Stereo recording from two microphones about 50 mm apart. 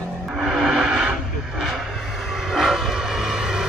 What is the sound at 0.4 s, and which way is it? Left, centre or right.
Music, centre.